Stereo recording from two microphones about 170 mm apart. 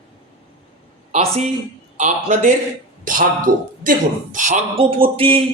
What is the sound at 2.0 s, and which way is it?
Speech, 45° right (ahead or behind).